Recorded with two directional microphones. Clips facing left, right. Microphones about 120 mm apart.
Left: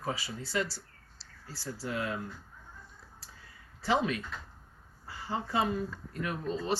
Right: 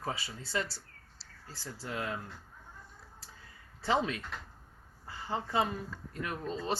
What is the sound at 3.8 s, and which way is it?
Speech, 25° right (ahead or behind).